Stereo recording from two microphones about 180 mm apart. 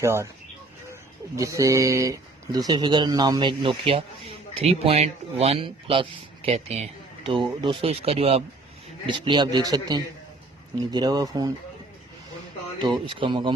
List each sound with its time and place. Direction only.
0.0 s speech: 15° right (ahead or behind)
1.4 s speech: 20° right (ahead or behind)
12.8 s speech: 25° right (ahead or behind)